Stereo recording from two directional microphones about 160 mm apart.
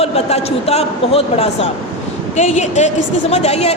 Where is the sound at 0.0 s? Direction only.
40° left (ahead or behind).